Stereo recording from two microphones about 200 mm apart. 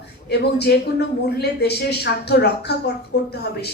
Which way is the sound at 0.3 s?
55° left (ahead or behind).